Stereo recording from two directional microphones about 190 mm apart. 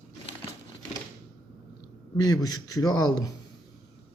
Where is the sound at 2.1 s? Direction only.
20° left (ahead or behind).